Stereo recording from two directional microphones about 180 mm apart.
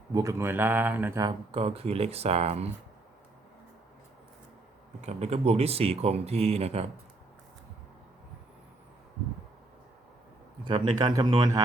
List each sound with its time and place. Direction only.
0.1 s speech: 15° right (ahead or behind)
1.2 s speech: 20° right (ahead or behind)
1.6 s speech: 35° right (ahead or behind)
4.9 s speech: 40° right (ahead or behind)
10.7 s speech: 25° right (ahead or behind)